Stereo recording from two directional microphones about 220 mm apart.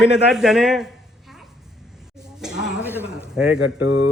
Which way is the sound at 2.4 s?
5° right (ahead or behind).